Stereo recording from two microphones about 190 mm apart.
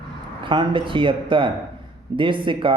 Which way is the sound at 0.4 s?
25° right (ahead or behind).